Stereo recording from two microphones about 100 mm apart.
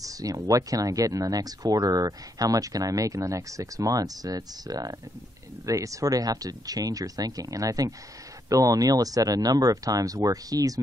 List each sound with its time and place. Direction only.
0.0 s speech: 35° right (ahead or behind)